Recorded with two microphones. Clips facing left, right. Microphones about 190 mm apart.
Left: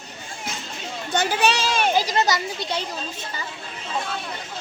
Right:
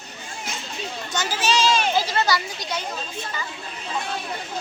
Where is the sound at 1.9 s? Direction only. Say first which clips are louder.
Left 1 dB; 15° left (ahead or behind).